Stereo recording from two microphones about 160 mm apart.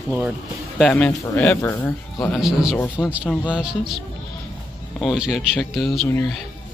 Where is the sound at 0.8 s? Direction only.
5° left (ahead or behind).